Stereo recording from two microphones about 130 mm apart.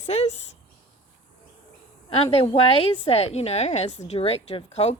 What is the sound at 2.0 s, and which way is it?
A woman's voice, 50° left (ahead or behind).